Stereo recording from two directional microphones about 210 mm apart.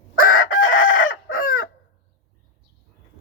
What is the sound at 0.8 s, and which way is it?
Chicken, 65° left (ahead or behind).